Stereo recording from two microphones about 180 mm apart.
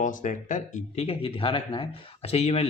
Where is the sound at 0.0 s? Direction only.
45° left (ahead or behind).